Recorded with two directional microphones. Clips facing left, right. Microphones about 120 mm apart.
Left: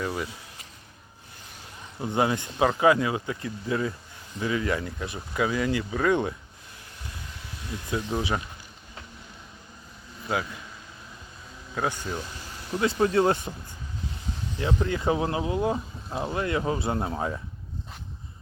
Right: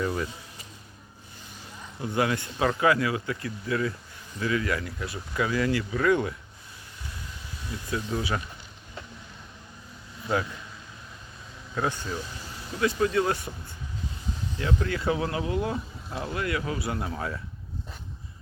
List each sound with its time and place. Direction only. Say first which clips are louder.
0.0 s speech: right 2 dB; 5° left (ahead or behind)
2.0 s speech: left 1 dB; 25° left (ahead or behind)
7.9 s speech: left 2 dB; 20° left (ahead or behind)
12.8 s speech: left 2 dB; 30° left (ahead or behind)
14.6 s speech: left 2 dB; 20° left (ahead or behind)